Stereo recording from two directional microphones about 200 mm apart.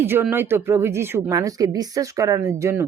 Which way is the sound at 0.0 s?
10° right (ahead or behind).